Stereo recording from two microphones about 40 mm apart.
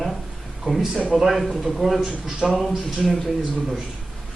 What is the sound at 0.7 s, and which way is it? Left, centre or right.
Speech, right.